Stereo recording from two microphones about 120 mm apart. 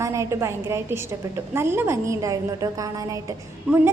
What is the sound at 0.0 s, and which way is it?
A woman's voice, 25° right (ahead or behind).